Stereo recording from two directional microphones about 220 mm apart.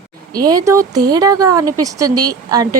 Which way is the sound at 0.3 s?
15° right (ahead or behind).